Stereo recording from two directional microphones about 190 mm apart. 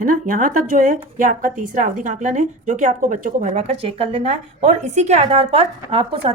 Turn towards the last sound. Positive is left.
turn(degrees=-30)  # may be behind; listen again after turning